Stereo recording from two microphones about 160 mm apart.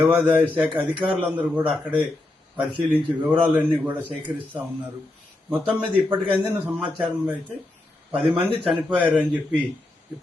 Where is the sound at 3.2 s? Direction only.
10° right (ahead or behind).